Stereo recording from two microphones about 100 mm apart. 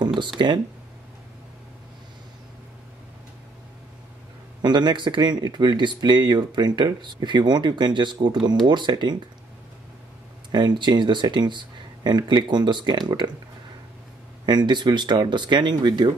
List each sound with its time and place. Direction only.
0.4 s speech: 45° right (ahead or behind)
4.6 s speech: 45° right (ahead or behind)
10.5 s speech: 50° right (ahead or behind)
14.4 s speech: 45° right (ahead or behind)